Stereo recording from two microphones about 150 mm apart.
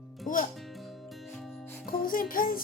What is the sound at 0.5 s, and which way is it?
Music, centre (ahead or behind).